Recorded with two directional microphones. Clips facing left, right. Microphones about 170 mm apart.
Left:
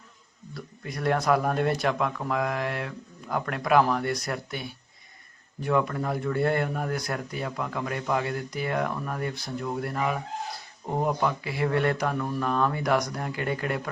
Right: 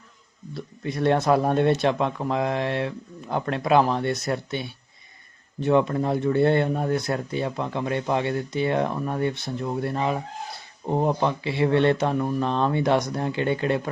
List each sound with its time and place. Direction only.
0.5 s speech: 25° right (ahead or behind)